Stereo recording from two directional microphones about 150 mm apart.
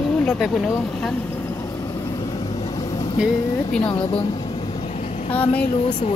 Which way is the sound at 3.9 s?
35° left (ahead or behind).